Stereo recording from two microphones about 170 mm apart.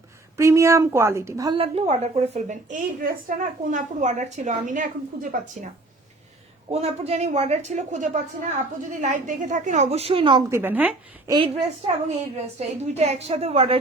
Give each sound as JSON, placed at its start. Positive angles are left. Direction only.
{"t": 0.3, "sound": "a woman's voice", "side_deg": -15}
{"t": 1.5, "sound": "a woman's voice", "side_deg": -35}
{"t": 6.7, "sound": "a woman's voice", "side_deg": -40}
{"t": 10.5, "sound": "a woman's voice", "side_deg": -10}
{"t": 11.3, "sound": "a woman's voice", "side_deg": -30}